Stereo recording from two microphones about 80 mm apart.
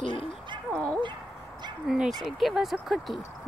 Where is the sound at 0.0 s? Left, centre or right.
Left.